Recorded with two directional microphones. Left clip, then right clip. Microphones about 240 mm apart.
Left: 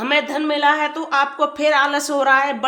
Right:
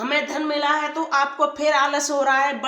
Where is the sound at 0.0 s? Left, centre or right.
Left.